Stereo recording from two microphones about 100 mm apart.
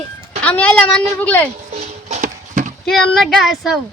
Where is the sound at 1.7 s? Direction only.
90° right.